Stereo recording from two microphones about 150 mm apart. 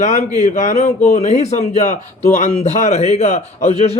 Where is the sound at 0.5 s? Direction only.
50° left (ahead or behind).